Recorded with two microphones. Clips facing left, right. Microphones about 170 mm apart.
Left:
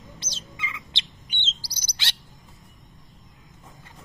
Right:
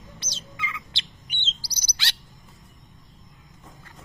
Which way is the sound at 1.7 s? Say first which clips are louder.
Right 1 dB; 50° left (ahead or behind).